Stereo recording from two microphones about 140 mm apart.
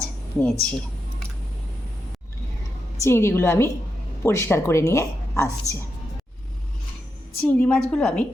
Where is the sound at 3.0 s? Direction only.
20° left (ahead or behind).